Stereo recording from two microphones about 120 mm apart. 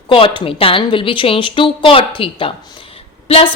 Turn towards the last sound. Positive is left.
turn(degrees=55)  # may be behind; listen again after turning